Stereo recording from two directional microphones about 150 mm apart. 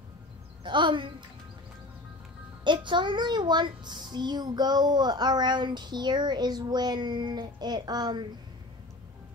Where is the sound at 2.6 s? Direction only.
30° right (ahead or behind).